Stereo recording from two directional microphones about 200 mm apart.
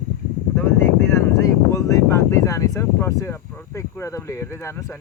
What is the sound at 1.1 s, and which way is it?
Speech, 15° left (ahead or behind).